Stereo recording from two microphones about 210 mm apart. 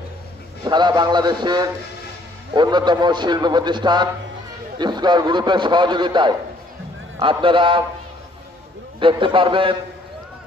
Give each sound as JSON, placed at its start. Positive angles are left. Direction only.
{"t": 0.7, "sound": "a man's voice", "side_deg": -20}
{"t": 9.0, "sound": "a man's voice", "side_deg": -25}